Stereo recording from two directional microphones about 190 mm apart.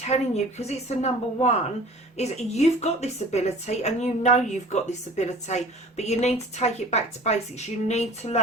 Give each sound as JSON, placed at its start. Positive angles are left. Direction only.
{"t": 0.0, "sound": "a woman's voice", "side_deg": 35}